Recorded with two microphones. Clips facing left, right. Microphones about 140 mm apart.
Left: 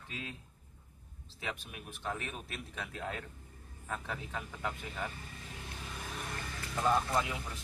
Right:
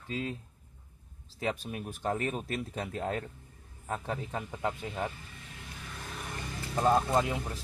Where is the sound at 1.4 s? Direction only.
40° right (ahead or behind).